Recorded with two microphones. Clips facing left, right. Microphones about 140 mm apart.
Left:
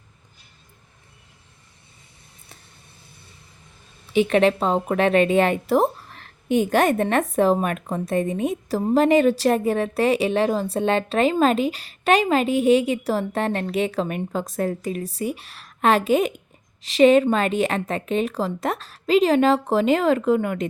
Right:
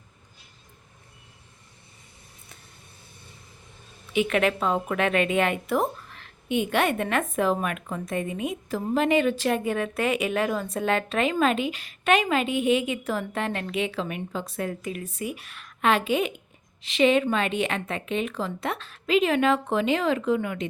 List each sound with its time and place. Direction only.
4.1 s a woman's voice: 30° left (ahead or behind)